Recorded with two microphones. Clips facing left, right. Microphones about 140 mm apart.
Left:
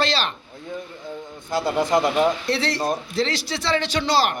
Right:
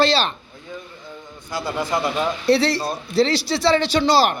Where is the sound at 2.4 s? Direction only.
30° right (ahead or behind).